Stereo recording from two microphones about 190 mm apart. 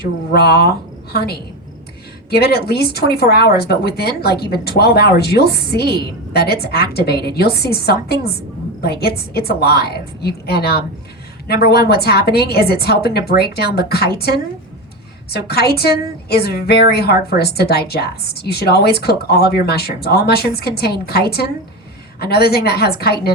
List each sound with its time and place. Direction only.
0.3 s a woman's voice: 55° left (ahead or behind)
15.3 s a woman's voice: 55° left (ahead or behind)